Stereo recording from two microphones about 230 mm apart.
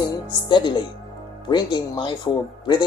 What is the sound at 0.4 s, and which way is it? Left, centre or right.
Speech, centre.